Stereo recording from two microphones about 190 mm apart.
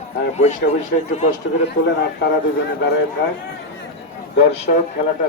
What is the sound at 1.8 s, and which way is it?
Speech, 60° left (ahead or behind).